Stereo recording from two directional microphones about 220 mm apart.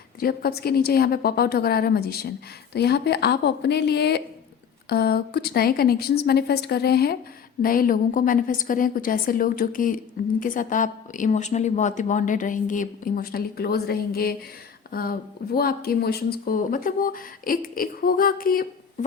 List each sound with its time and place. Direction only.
0.2 s a woman's voice: 45° left (ahead or behind)